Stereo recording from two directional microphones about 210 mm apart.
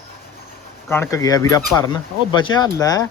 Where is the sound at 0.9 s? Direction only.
15° left (ahead or behind).